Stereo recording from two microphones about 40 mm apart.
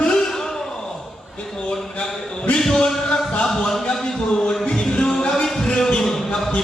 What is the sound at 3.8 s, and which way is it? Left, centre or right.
Music, centre.